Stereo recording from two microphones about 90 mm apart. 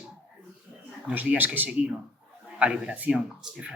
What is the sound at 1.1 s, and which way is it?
Speech, 20° right (ahead or behind).